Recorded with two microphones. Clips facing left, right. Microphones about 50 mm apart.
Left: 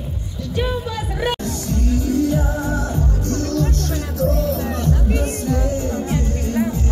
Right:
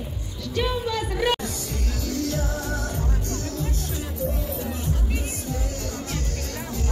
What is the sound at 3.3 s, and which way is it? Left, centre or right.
Music, left.